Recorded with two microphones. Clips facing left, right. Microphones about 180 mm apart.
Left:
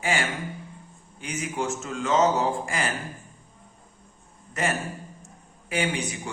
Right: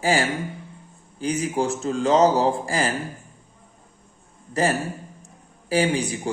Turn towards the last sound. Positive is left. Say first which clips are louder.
# right 6 dB
turn(degrees=-35)  # may be behind; listen again after turning